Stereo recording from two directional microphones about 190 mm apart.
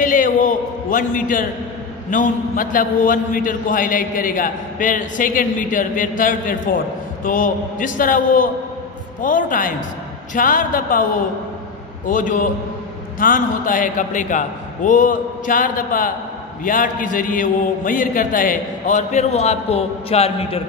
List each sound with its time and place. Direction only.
0.0 s a man's voice: 45° left (ahead or behind)
12.1 s a man's voice: 45° left (ahead or behind)